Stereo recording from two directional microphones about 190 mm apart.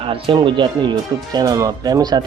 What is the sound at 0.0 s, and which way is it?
Speech, 25° right (ahead or behind).